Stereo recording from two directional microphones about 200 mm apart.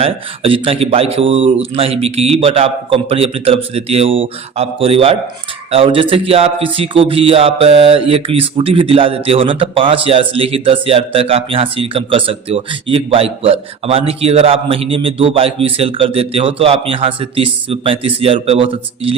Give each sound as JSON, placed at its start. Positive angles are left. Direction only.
{"t": 0.0, "sound": "a man's voice", "side_deg": -25}